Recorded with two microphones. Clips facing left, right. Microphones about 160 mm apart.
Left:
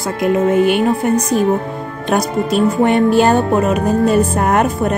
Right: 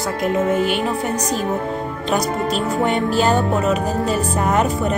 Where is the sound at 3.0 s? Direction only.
55° left (ahead or behind).